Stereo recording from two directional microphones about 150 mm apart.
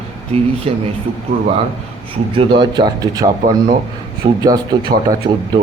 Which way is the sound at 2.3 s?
35° right (ahead or behind).